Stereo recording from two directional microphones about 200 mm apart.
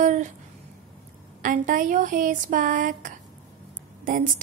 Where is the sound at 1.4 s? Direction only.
40° right (ahead or behind).